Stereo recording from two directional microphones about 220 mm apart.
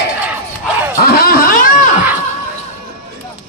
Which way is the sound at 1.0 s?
45° left (ahead or behind).